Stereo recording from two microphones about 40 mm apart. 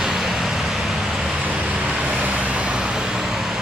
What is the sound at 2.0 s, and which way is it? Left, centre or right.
Vehicle, right.